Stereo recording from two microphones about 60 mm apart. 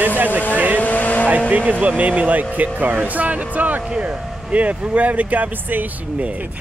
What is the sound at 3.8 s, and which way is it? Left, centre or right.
Speech, centre.